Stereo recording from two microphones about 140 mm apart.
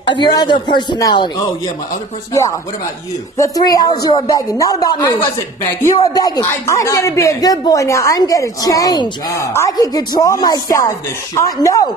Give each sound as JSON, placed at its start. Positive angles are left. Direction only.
{"t": 0.0, "sound": "speech", "side_deg": 35}
{"t": 3.3, "sound": "a woman's voice", "side_deg": 25}